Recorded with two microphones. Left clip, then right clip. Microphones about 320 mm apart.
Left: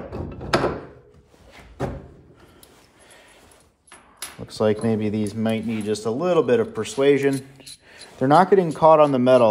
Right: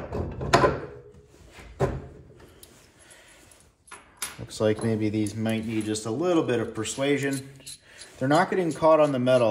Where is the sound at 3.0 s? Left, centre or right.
Left.